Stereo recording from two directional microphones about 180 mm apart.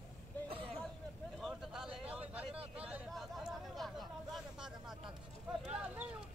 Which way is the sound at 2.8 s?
5° right (ahead or behind).